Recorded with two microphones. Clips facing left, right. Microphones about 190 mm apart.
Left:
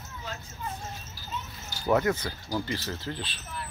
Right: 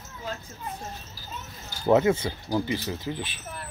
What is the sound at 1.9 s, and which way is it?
Speech, 20° right (ahead or behind).